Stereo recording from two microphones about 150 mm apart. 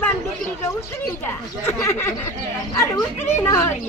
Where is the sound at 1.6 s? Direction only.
15° left (ahead or behind).